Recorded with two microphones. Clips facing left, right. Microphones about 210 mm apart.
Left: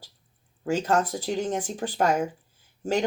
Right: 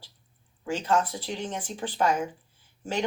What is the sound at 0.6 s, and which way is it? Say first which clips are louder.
Speech: left 2 dB; 40° left (ahead or behind).